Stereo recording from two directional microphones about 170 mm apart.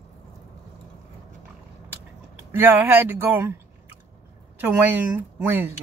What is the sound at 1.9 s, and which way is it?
Speech, 15° right (ahead or behind).